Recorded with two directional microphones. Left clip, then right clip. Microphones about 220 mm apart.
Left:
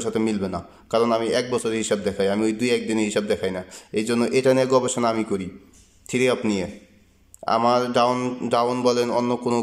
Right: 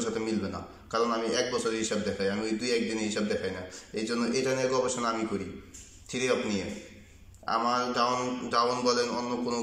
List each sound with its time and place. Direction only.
0.0 s a man's voice: 40° left (ahead or behind)